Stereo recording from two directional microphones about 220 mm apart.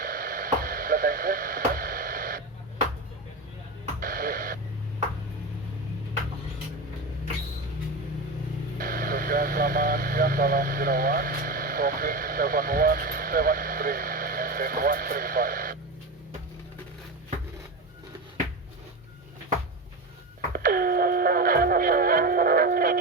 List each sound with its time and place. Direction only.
0.0 s radio: 40° right (ahead or behind)
4.0 s a sound: 40° right (ahead or behind)
8.8 s radio: 40° right (ahead or behind)
20.5 s music: 40° right (ahead or behind)